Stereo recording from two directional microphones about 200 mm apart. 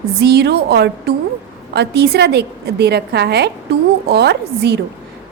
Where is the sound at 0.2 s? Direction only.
55° right (ahead or behind).